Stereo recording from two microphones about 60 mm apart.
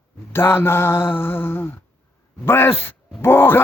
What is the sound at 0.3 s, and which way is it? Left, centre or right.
Speech, left.